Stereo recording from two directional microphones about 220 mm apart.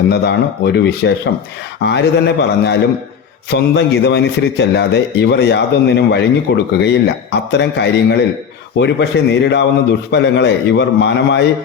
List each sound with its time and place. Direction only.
0.1 s a man's voice: 50° left (ahead or behind)